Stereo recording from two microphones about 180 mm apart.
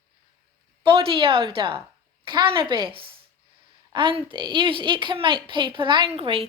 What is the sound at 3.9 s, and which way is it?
A woman's voice, 25° right (ahead or behind).